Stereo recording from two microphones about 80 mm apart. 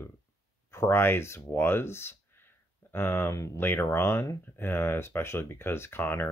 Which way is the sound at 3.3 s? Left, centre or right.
Left.